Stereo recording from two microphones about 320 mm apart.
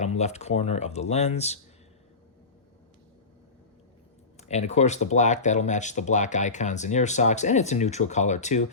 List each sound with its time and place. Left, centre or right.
0.0 s speech: left
4.4 s speech: left